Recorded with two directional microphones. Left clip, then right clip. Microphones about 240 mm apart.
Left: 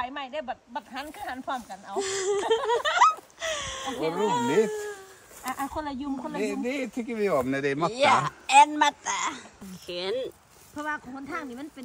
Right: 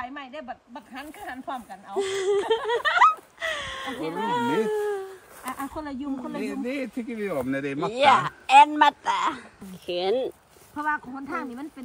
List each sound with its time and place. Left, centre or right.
0.0 s speech: centre
6.1 s speech: centre
7.2 s speech: left
7.9 s speech: centre
10.8 s speech: centre